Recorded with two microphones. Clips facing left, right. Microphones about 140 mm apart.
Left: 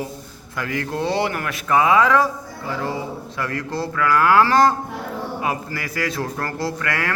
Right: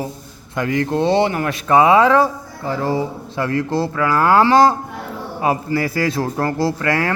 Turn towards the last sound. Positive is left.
turn(degrees=-30)  # may be behind; listen again after turning